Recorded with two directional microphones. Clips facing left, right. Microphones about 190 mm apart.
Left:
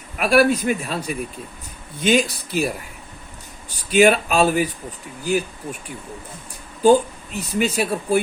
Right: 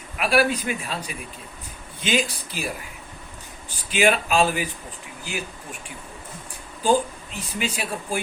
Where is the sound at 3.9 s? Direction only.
40° left (ahead or behind).